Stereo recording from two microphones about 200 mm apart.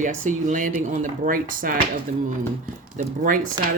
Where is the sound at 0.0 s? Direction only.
40° right (ahead or behind).